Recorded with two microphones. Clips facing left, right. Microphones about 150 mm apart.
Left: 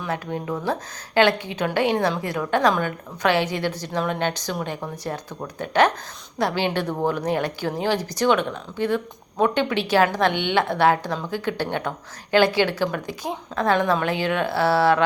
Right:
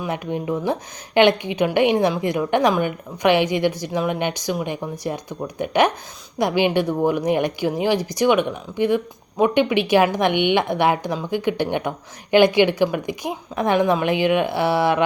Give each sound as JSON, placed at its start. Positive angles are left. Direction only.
{"t": 0.0, "sound": "a woman's voice", "side_deg": -15}